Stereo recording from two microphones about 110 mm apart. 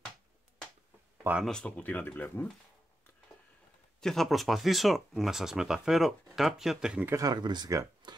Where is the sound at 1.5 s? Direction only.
10° left (ahead or behind).